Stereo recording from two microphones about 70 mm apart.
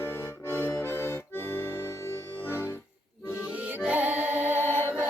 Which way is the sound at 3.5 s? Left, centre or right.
Right.